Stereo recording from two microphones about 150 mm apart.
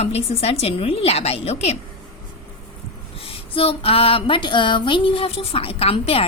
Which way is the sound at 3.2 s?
40° left (ahead or behind).